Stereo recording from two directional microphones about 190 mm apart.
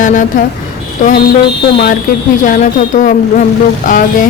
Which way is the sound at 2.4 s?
45° left (ahead or behind).